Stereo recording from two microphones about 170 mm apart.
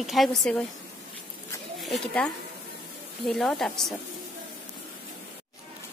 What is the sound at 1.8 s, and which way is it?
A woman's voice, centre (ahead or behind).